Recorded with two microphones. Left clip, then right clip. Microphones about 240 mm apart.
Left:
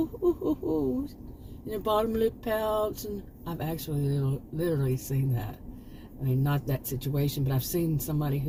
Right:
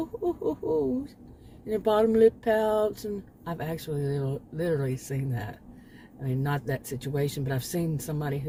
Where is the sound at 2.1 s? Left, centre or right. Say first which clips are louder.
Right 7 dB; right.